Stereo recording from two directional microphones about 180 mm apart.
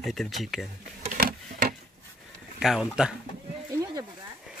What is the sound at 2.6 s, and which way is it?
Speech, 5° right (ahead or behind).